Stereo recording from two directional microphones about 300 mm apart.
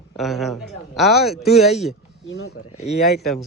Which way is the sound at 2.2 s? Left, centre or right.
Left.